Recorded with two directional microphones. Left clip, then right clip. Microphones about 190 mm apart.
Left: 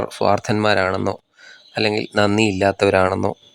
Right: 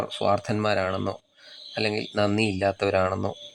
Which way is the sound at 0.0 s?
25° left (ahead or behind).